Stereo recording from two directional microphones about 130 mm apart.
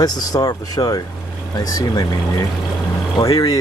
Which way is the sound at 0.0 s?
30° left (ahead or behind).